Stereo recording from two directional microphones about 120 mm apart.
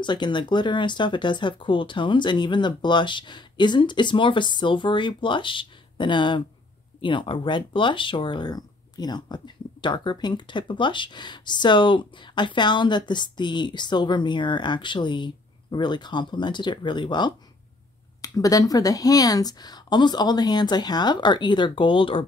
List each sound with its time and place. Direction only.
0.0 s speech: 40° left (ahead or behind)
18.2 s speech: 30° left (ahead or behind); by 22.2 s 45° left (ahead or behind)